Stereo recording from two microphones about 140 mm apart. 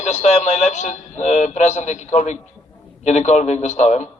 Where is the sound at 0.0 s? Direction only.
55° left (ahead or behind).